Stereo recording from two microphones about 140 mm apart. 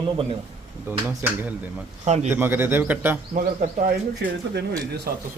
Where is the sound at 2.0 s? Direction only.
55° right (ahead or behind).